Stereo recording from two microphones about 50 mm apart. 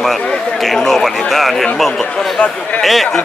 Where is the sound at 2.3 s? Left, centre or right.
Left.